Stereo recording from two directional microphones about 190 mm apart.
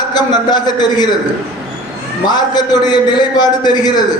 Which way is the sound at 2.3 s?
20° left (ahead or behind).